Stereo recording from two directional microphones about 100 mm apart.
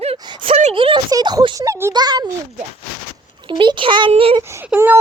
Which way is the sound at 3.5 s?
55° right (ahead or behind).